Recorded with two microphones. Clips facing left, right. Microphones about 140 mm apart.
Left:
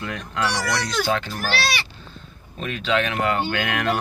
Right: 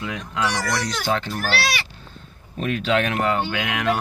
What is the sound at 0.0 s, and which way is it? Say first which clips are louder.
Speech: right 1 dB; 15° right (ahead or behind).